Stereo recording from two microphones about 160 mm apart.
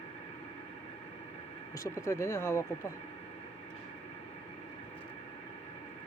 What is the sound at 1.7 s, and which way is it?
Speech, 20° left (ahead or behind).